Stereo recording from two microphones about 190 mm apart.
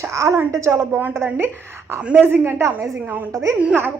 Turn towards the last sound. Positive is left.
turn(degrees=-10)  # may be behind; listen again after turning